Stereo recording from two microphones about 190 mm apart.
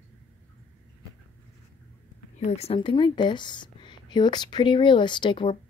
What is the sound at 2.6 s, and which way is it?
A woman's voice, 30° left (ahead or behind).